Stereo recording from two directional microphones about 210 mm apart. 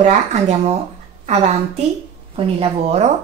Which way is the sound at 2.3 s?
30° right (ahead or behind).